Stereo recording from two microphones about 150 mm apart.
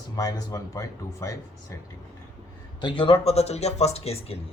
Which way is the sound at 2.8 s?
35° left (ahead or behind).